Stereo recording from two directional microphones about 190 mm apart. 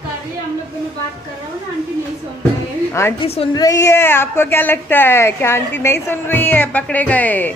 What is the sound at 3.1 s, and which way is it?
Speech, 30° left (ahead or behind).